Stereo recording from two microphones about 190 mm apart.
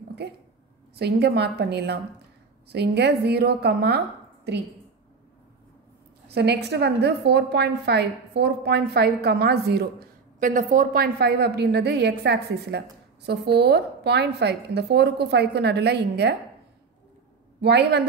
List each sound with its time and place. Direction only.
0.9 s a woman's voice: 60° right (ahead or behind)
6.3 s a woman's voice: 60° right (ahead or behind)
10.4 s a woman's voice: 45° right (ahead or behind); by 16.3 s 60° right (ahead or behind)
17.6 s a woman's voice: 60° right (ahead or behind)